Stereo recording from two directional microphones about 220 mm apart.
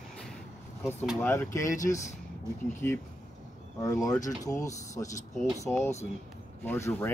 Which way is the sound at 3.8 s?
15° left (ahead or behind).